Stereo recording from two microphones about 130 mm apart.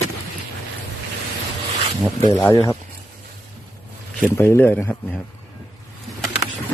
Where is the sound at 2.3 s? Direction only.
20° left (ahead or behind).